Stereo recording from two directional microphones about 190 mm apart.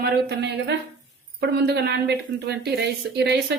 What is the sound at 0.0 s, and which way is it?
A woman's voice, 60° right (ahead or behind).